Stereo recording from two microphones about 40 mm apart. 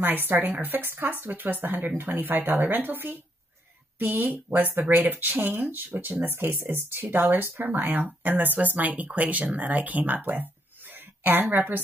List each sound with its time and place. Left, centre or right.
0.0 s speech: right
4.0 s speech: right
7.1 s speech: right